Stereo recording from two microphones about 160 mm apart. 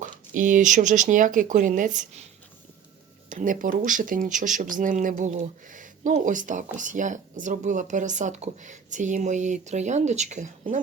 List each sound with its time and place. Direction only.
0.0 s speech: 55° right (ahead or behind)
3.2 s speech: 55° right (ahead or behind)